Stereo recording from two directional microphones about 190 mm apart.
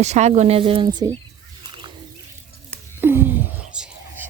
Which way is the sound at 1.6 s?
25° right (ahead or behind).